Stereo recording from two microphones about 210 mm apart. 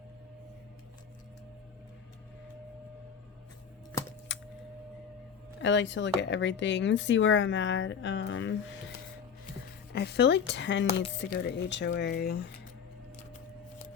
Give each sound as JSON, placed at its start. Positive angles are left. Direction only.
{"t": 4.3, "sound": "a sound", "side_deg": 60}
{"t": 5.5, "sound": "speech", "side_deg": 60}
{"t": 9.9, "sound": "speech", "side_deg": 50}